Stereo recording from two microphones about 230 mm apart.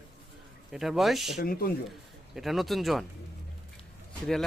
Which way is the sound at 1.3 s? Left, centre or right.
Left.